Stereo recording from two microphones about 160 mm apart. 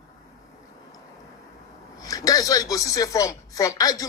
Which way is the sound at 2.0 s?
20° left (ahead or behind).